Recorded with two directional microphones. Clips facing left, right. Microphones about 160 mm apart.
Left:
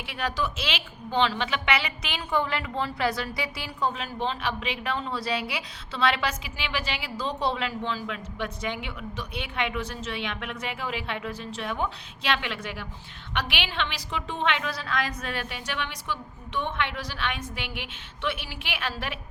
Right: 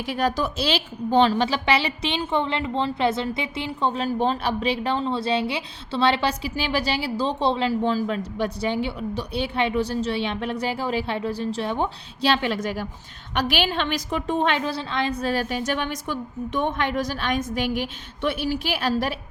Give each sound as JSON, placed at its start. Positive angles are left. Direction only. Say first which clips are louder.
{"t": 0.0, "sound": "a woman's voice", "louder": "right 6 dB", "side_deg": -40}